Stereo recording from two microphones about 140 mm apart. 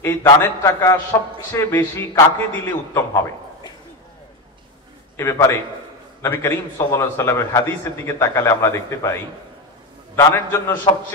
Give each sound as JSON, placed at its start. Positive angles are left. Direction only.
{"t": 0.0, "sound": "a man's voice", "side_deg": 15}
{"t": 5.1, "sound": "a man's voice", "side_deg": 20}
{"t": 10.9, "sound": "a man's voice", "side_deg": 35}